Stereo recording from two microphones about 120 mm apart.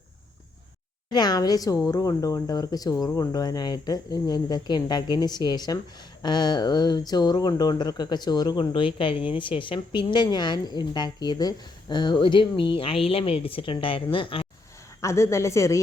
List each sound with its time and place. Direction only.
1.1 s a woman's voice: 35° left (ahead or behind)
15.0 s speech: 25° left (ahead or behind)